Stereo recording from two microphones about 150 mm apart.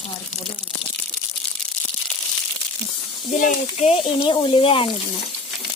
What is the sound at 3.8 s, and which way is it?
Speech, 40° left (ahead or behind).